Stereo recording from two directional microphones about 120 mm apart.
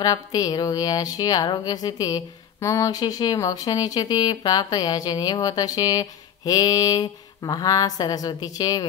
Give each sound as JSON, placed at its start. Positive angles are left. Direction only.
{"t": 0.0, "sound": "speech", "side_deg": 35}